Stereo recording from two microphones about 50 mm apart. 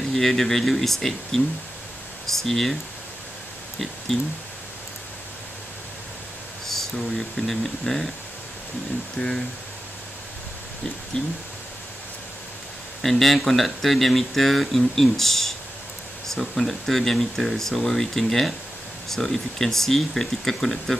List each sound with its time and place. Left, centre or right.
0.1 s speech: centre
4.1 s speech: centre
6.7 s speech: centre
9.2 s speech: centre
11.1 s speech: centre
13.0 s speech: centre